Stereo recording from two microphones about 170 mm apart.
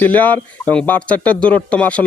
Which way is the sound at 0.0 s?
10° left (ahead or behind).